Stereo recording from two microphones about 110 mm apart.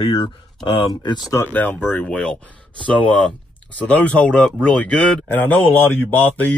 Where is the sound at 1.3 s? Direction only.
20° left (ahead or behind).